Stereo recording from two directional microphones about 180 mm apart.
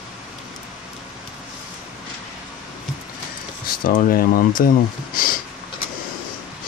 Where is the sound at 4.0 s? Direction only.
55° left (ahead or behind).